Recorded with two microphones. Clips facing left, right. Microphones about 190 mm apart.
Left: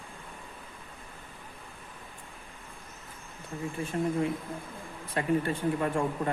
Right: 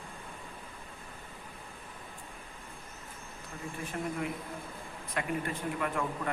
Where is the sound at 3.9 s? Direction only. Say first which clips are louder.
Left 7 dB; 30° left (ahead or behind).